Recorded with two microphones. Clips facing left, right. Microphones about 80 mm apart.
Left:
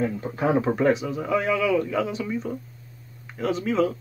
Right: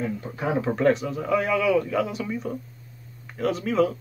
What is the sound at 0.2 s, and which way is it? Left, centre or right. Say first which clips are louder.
Speech: left 4 dB; left.